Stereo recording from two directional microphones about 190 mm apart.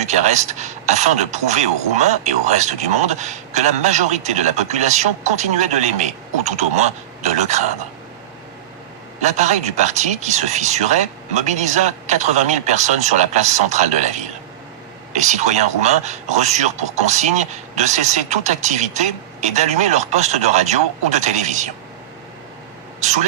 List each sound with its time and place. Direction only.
0.0 s speech: 35° right (ahead or behind)
9.2 s speech: 35° right (ahead or behind)
23.0 s speech: 35° right (ahead or behind)